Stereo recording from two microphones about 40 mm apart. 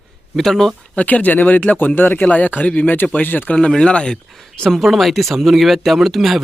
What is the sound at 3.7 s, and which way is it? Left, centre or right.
Speech, left.